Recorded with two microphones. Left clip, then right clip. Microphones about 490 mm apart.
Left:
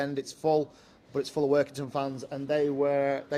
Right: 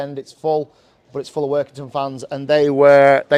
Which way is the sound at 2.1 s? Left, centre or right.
Right.